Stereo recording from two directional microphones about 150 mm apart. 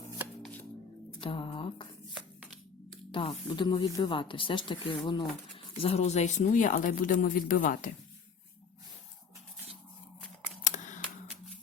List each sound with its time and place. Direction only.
1.2 s mantra: 35° left (ahead or behind)
3.1 s speech: 35° left (ahead or behind); by 7.9 s 60° left (ahead or behind)
10.6 s camera: 55° left (ahead or behind)